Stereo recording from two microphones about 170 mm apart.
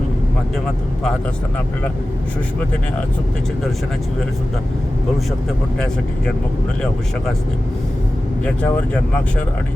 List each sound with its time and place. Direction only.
8.4 s speech: 5° left (ahead or behind)